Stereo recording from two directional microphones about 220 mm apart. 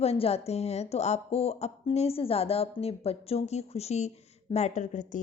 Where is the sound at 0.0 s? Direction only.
25° left (ahead or behind).